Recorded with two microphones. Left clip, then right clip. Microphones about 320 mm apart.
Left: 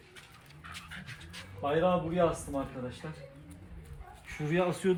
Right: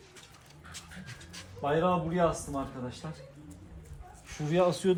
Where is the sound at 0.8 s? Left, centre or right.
Right.